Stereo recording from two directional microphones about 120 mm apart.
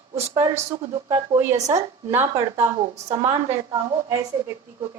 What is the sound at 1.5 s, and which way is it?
Speech, 25° right (ahead or behind).